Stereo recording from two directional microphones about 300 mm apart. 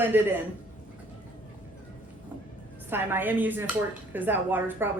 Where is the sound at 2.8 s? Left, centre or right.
Centre.